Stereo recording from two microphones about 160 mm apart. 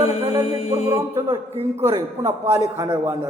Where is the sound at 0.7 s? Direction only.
20° right (ahead or behind).